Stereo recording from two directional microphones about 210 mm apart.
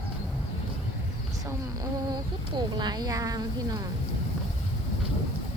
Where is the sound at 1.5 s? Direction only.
20° right (ahead or behind).